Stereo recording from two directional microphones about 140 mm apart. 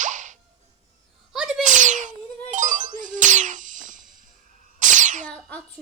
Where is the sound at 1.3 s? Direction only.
5° right (ahead or behind).